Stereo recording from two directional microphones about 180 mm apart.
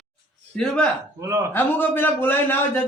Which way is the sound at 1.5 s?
10° left (ahead or behind).